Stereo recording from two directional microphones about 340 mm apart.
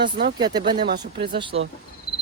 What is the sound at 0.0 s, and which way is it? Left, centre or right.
Speech, right.